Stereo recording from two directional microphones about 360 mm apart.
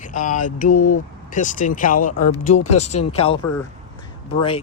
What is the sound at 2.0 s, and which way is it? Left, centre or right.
Speech, left.